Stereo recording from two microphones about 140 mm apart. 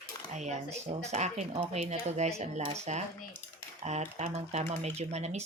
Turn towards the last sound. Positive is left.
turn(degrees=-50)  # may be behind; listen again after turning